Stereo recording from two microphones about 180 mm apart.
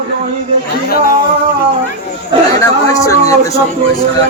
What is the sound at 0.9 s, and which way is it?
Speech, 55° left (ahead or behind).